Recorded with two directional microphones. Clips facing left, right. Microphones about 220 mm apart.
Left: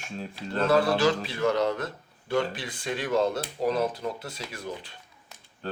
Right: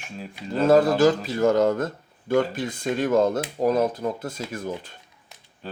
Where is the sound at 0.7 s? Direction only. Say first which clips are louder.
Right 6 dB; 45° right (ahead or behind).